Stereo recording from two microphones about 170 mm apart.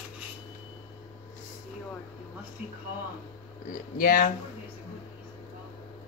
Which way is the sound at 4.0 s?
55° left (ahead or behind).